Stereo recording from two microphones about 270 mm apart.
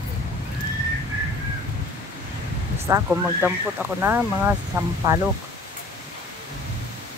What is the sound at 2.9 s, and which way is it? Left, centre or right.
Speech, centre.